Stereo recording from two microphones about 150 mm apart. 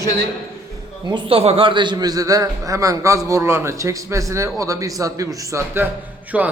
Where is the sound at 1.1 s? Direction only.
40° right (ahead or behind).